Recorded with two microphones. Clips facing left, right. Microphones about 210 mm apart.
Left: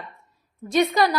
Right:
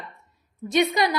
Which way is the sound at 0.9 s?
20° right (ahead or behind).